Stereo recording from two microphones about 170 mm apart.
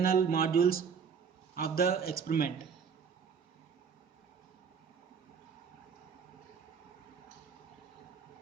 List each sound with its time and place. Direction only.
0.0 s speech: 60° left (ahead or behind)